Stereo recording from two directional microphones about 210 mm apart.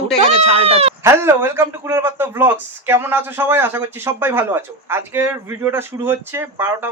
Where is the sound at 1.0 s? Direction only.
10° right (ahead or behind).